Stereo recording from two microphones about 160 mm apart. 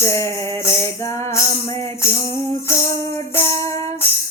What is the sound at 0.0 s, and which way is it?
Music, 15° left (ahead or behind).